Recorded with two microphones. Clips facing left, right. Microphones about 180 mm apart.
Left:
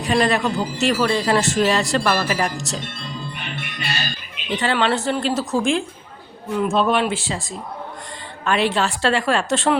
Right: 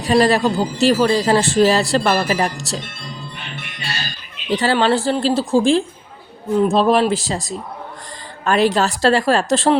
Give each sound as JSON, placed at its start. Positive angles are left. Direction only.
{"t": 0.0, "sound": "speech", "side_deg": -35}
{"t": 4.5, "sound": "speech", "side_deg": -35}